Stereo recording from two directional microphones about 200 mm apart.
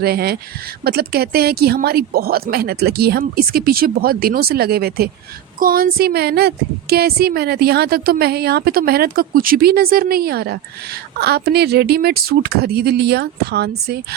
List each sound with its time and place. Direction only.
0.0 s a woman's voice: 50° right (ahead or behind)